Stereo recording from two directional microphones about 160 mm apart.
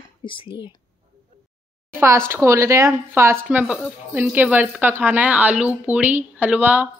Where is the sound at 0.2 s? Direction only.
30° left (ahead or behind).